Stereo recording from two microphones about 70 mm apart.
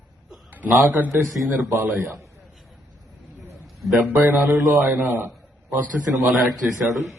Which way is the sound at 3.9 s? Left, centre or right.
Right.